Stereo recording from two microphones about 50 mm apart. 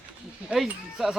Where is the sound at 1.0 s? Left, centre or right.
Centre.